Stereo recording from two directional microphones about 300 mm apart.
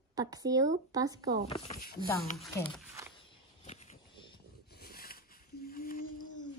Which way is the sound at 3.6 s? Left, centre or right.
Left.